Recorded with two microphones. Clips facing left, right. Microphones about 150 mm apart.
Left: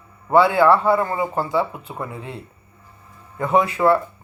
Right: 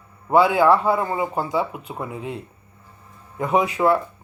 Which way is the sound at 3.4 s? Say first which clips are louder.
Left 1 dB; 10° right (ahead or behind).